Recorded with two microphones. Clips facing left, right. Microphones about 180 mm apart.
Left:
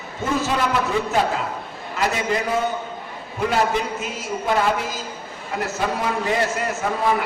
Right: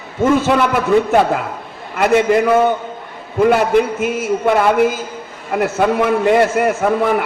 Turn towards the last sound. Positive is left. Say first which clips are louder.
# right 7 dB
turn(degrees=-55)  # may be behind; listen again after turning